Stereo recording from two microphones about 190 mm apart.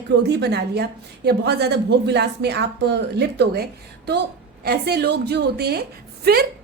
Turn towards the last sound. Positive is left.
turn(degrees=-55)  # may be behind; listen again after turning